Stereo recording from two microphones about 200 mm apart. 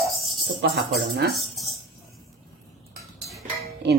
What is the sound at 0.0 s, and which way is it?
Music, centre (ahead or behind).